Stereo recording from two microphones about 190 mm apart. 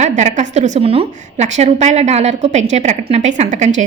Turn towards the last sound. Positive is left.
turn(degrees=-40)  # may be behind; listen again after turning